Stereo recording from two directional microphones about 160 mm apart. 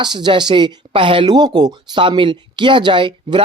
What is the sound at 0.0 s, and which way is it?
Speech, 30° right (ahead or behind).